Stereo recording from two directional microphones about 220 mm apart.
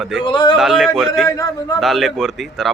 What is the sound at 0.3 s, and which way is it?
Speech, 20° left (ahead or behind).